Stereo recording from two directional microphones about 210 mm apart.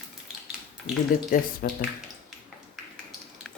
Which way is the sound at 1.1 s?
40° left (ahead or behind).